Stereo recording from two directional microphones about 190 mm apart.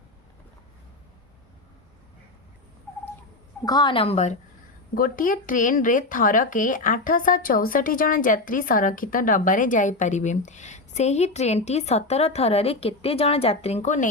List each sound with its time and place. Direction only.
3.7 s a woman's voice: 25° left (ahead or behind)
4.9 s speech: 45° left (ahead or behind)